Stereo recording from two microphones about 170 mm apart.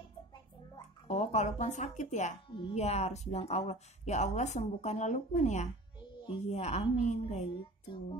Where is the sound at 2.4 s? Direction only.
30° left (ahead or behind).